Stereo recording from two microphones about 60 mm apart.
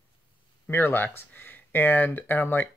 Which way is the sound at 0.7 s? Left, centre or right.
Left.